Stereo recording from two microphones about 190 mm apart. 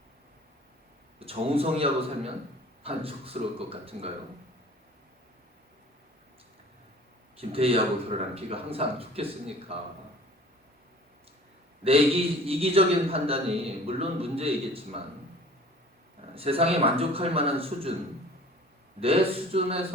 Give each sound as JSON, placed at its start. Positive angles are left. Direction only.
{"t": 1.2, "sound": "a man's voice", "side_deg": -30}
{"t": 7.3, "sound": "a man's voice", "side_deg": -30}
{"t": 11.8, "sound": "a man's voice", "side_deg": -30}
{"t": 16.3, "sound": "speech", "side_deg": -30}
{"t": 18.9, "sound": "a man's voice", "side_deg": -30}